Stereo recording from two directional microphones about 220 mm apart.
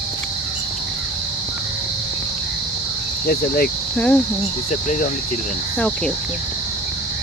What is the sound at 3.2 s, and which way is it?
Speech, 45° left (ahead or behind).